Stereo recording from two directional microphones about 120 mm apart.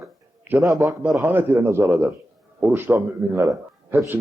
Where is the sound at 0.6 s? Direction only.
30° right (ahead or behind).